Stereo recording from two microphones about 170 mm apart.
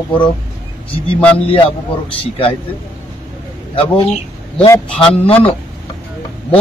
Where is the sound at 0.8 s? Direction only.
30° left (ahead or behind).